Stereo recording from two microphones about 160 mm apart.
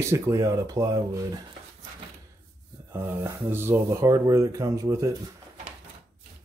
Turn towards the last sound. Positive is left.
turn(degrees=-20)  # may be behind; listen again after turning